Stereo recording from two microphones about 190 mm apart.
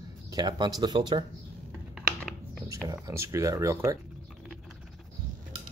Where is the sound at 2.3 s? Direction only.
Centre (ahead or behind).